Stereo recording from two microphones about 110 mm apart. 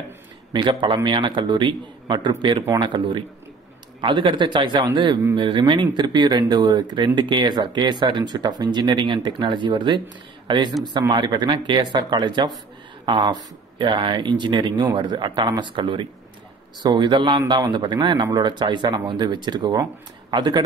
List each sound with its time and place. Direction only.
0.5 s speech: 45° right (ahead or behind)